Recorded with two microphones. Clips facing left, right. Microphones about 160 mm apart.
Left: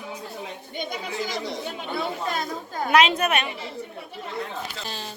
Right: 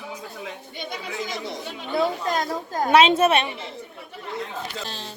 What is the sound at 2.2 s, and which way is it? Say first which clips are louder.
Speech: right 3 dB; 40° right (ahead or behind).